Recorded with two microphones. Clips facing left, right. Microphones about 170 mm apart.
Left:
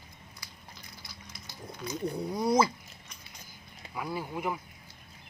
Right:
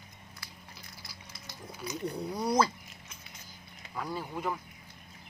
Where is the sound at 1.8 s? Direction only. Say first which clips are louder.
Left 2 dB; 10° right (ahead or behind).